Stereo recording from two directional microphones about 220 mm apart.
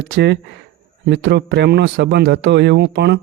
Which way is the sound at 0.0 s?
50° right (ahead or behind).